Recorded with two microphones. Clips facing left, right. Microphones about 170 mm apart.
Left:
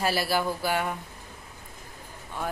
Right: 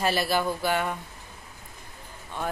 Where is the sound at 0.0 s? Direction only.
10° left (ahead or behind).